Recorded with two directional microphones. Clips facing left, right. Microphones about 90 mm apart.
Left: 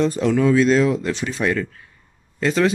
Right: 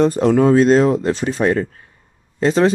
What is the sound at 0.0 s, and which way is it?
Speech, 45° right (ahead or behind).